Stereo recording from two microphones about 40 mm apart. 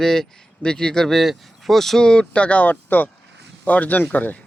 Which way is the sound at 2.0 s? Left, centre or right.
Left.